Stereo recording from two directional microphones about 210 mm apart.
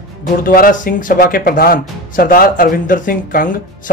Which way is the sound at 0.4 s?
40° left (ahead or behind).